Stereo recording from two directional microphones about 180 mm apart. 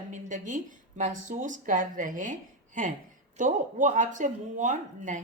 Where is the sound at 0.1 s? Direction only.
45° right (ahead or behind).